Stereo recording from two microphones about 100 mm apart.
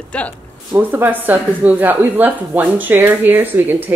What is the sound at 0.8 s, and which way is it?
Speech, 20° right (ahead or behind).